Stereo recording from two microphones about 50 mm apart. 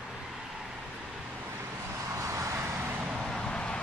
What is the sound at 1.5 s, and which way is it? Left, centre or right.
Vehicle, right.